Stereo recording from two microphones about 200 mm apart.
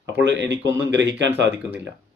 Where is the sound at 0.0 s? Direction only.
60° right (ahead or behind).